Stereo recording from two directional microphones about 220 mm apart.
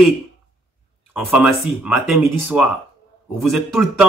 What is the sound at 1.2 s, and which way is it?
Speech, 5° right (ahead or behind).